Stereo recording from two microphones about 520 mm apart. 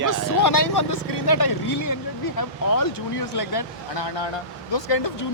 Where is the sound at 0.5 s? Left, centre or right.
Left.